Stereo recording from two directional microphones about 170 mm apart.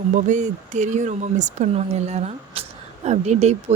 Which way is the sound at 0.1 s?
45° right (ahead or behind).